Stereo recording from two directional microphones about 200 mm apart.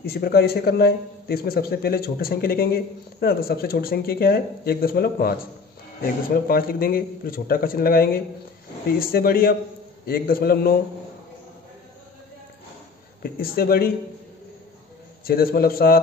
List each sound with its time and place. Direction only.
0.0 s a man's voice: 50° left (ahead or behind)
13.2 s a man's voice: 50° left (ahead or behind)
15.2 s a man's voice: 50° left (ahead or behind)